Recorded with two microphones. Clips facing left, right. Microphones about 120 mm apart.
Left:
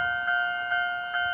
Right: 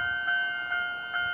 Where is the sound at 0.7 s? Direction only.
90° left.